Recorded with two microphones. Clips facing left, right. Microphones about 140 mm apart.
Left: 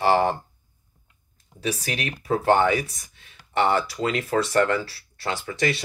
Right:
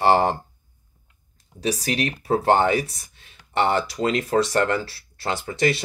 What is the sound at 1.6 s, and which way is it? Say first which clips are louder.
Speech: right 4 dB; 35° right (ahead or behind).